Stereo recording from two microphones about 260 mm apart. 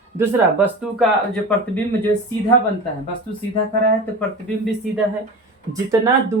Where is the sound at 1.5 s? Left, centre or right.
Centre.